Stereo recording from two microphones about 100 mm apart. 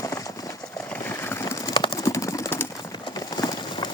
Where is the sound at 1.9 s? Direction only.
35° left (ahead or behind).